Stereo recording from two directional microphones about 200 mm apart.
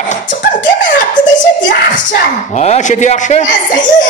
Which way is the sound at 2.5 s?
35° left (ahead or behind).